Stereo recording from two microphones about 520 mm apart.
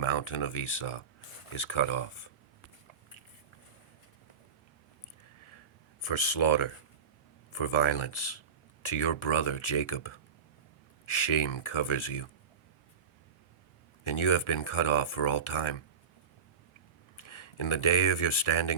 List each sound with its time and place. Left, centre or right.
0.0 s speech: left
6.0 s speech: left
14.0 s speech: left
17.2 s speech: left